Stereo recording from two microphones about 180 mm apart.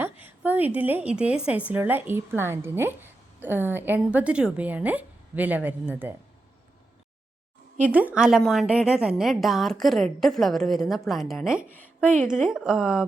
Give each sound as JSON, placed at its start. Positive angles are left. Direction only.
{"t": 0.0, "sound": "a woman's voice", "side_deg": -10}
{"t": 7.8, "sound": "a woman's voice", "side_deg": -10}